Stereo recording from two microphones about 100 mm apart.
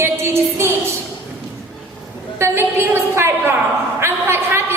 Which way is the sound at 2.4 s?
25° right (ahead or behind).